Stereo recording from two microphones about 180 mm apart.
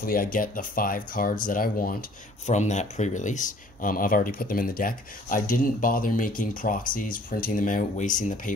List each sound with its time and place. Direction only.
0.0 s speech: 50° left (ahead or behind)